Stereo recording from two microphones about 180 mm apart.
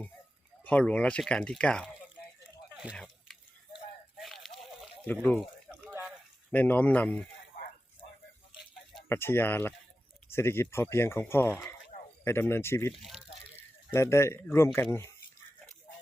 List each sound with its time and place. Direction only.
0.6 s speech: 10° left (ahead or behind)
2.9 s a sound: 5° left (ahead or behind)
5.9 s a sound: 5° right (ahead or behind)
6.5 s speech: 10° left (ahead or behind)
9.0 s speech: 15° left (ahead or behind)
12.9 s speech: centre (ahead or behind)
13.6 s speech: 15° left (ahead or behind)